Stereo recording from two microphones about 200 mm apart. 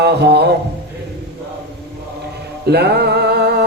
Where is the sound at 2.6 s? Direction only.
55° right (ahead or behind).